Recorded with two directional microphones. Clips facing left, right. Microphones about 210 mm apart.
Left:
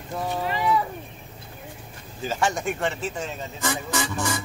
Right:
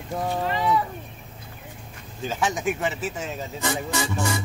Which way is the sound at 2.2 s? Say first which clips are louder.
Even; centre (ahead or behind).